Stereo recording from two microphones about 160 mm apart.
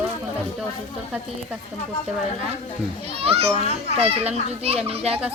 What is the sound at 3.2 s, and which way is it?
A child's voice, 35° right (ahead or behind).